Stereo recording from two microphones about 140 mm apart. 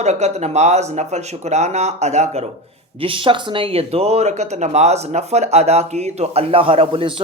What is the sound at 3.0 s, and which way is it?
Speech, 40° right (ahead or behind).